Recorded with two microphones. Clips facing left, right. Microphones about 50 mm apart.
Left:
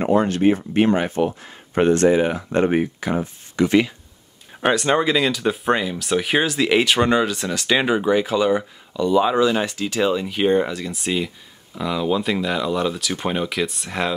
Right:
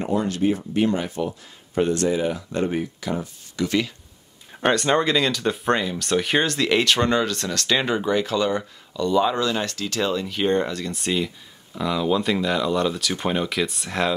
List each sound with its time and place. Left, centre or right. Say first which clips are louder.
0.0 s speech: left 5 dB; left
4.6 s speech: left 1 dB; centre